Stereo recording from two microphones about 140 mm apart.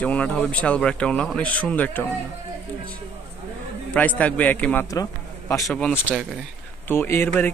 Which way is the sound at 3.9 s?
10° left (ahead or behind).